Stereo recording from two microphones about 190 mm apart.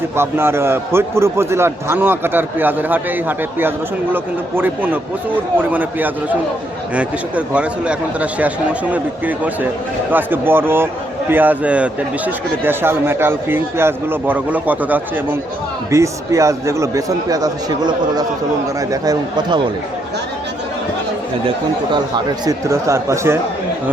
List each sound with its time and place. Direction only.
0.2 s speech: 10° right (ahead or behind)
22.4 s speech: 15° right (ahead or behind)